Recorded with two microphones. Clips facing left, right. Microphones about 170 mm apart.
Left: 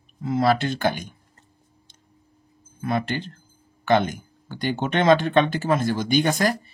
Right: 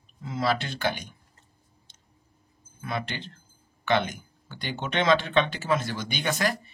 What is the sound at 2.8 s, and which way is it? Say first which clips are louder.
Speech: left 8 dB; 45° left (ahead or behind).